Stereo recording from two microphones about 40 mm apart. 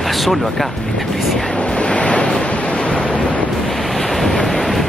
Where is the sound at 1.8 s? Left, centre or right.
Left.